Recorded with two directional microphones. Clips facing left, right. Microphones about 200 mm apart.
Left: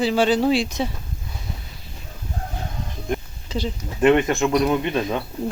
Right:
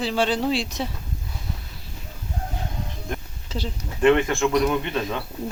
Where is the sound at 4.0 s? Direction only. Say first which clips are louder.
Left 2 dB; 20° left (ahead or behind).